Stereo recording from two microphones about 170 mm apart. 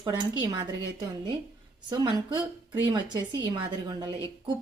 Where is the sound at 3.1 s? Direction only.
25° right (ahead or behind).